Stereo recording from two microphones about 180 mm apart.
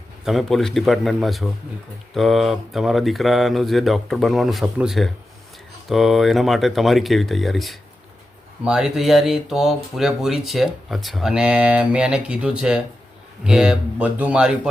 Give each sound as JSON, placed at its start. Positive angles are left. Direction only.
{"t": 0.3, "sound": "speech", "side_deg": 0}